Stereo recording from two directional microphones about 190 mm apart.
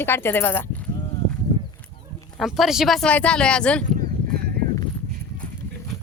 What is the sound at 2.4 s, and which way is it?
A woman's voice, centre (ahead or behind).